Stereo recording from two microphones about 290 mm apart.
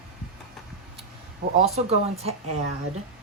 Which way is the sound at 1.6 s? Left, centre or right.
Right.